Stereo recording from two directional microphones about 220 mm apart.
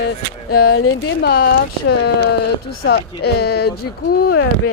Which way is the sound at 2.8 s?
45° left (ahead or behind).